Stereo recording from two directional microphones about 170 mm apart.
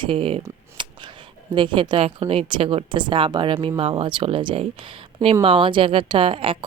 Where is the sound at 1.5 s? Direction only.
30° right (ahead or behind).